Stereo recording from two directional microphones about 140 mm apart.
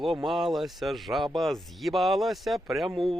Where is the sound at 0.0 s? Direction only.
Centre (ahead or behind).